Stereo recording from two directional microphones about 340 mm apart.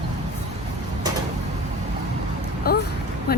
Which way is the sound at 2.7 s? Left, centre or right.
Left.